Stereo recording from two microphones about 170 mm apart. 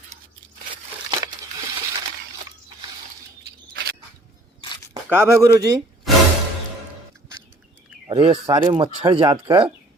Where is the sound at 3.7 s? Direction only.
90° right.